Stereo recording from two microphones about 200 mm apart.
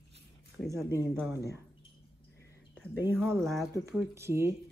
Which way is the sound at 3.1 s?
5° left (ahead or behind).